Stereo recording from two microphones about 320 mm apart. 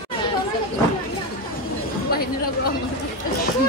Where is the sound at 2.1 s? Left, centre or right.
Left.